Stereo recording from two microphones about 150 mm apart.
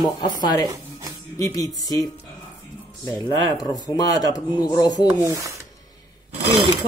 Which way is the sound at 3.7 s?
25° left (ahead or behind).